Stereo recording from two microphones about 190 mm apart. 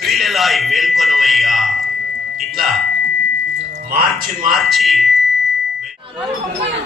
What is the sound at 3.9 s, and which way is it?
Music, 50° right (ahead or behind).